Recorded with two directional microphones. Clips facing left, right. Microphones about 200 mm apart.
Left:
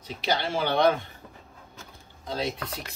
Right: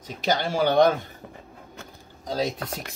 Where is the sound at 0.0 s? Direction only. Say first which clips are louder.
Right 3 dB; 45° right (ahead or behind).